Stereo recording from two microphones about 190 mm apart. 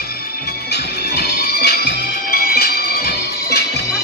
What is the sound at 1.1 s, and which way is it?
Music, 55° left (ahead or behind).